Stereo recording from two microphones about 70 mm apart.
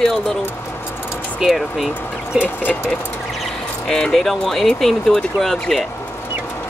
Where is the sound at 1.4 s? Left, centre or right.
Centre.